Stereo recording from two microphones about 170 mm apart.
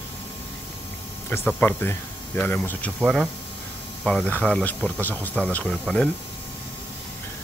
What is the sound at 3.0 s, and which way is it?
Speech, 5° right (ahead or behind).